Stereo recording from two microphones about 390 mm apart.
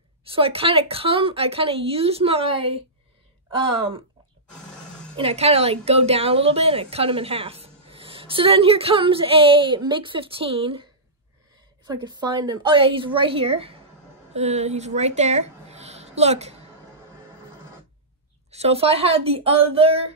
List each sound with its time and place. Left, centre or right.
0.3 s a woman's voice: centre
5.1 s a woman's voice: centre
18.5 s a woman's voice: centre